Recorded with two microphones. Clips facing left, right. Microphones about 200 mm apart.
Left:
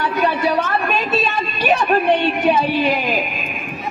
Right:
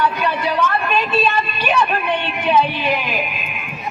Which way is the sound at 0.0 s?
40° left (ahead or behind).